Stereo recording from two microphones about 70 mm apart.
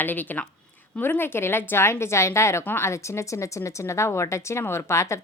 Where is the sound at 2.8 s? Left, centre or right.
Left.